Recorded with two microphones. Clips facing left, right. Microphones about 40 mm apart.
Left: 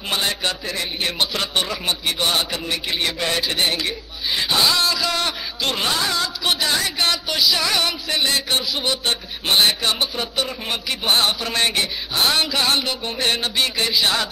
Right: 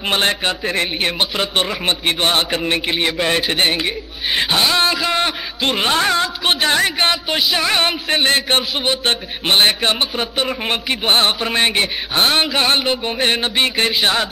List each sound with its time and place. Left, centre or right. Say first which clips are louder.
0.1 s a man's voice: right 5 dB; right
0.4 s a man's voice: right 5 dB; right
3.3 s a man's voice: right 4 dB; right